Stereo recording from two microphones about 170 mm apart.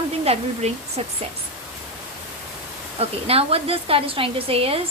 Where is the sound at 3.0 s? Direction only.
35° right (ahead or behind).